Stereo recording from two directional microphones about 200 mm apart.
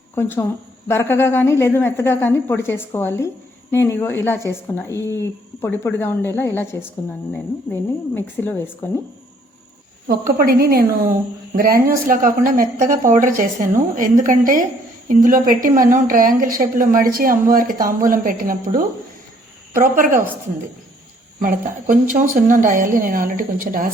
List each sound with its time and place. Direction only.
0.2 s a woman's voice: 10° left (ahead or behind)
10.3 s a woman's voice: 50° right (ahead or behind)
21.3 s a woman's voice: 40° right (ahead or behind)